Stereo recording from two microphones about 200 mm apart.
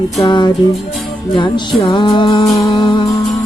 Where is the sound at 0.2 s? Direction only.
20° left (ahead or behind).